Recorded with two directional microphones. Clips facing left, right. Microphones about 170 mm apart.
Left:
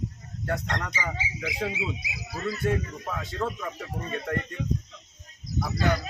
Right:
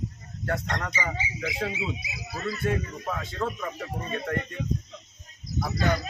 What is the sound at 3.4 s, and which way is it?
Speech, 5° left (ahead or behind).